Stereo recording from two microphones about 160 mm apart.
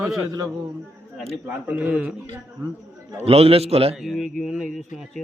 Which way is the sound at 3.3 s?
40° right (ahead or behind).